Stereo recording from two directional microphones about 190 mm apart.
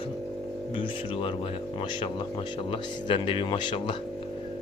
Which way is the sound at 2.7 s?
25° left (ahead or behind).